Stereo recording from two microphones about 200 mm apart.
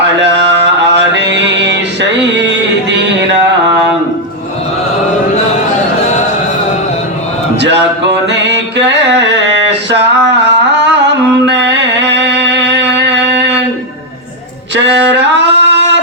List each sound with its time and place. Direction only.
0.2 s mantra: 60° right (ahead or behind)
7.6 s music: 60° right (ahead or behind)
14.8 s a sound: 60° right (ahead or behind)